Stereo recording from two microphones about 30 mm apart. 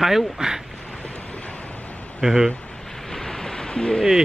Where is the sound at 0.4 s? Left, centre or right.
Right.